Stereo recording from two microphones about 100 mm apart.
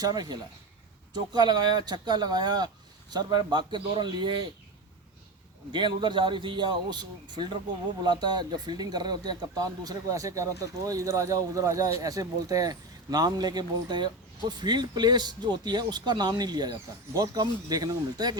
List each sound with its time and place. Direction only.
0.0 s speech: 40° right (ahead or behind)
5.7 s speech: 50° right (ahead or behind)